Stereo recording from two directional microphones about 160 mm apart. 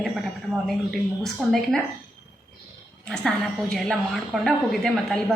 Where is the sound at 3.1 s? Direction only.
5° left (ahead or behind).